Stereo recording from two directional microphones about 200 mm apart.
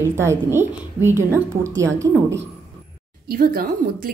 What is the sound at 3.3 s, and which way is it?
Speech, 45° right (ahead or behind).